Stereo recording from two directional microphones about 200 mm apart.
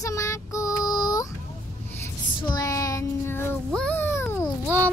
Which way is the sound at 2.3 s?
20° left (ahead or behind).